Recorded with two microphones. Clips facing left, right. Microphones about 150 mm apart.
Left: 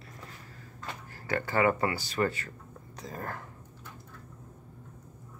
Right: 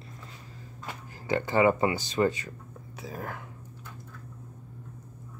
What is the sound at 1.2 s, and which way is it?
Speech, 20° right (ahead or behind).